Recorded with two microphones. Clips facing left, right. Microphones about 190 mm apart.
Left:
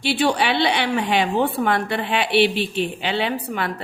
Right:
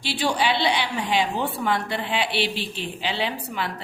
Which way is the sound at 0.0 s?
60° left (ahead or behind).